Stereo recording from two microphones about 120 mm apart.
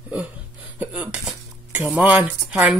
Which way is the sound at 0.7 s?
10° right (ahead or behind).